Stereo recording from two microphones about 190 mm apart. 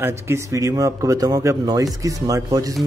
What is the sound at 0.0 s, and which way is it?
A man's voice, 15° right (ahead or behind).